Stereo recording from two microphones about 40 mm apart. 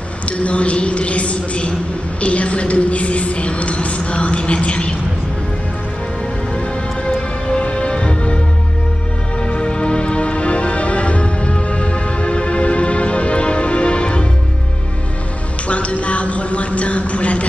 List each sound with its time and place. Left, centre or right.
0.4 s a woman's voice: left
7.4 s music: left
9.4 s music: left
15.7 s a sound: left